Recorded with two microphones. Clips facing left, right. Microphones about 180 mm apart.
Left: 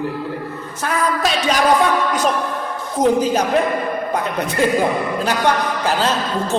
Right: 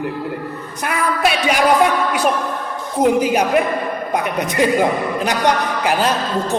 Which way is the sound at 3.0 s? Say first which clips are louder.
Right 1 dB; 10° right (ahead or behind).